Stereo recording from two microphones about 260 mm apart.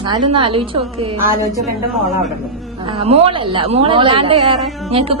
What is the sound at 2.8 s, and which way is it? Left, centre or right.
A woman's voice, right.